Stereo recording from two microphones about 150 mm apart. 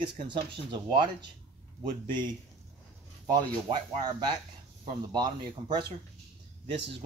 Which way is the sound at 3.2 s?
25° right (ahead or behind).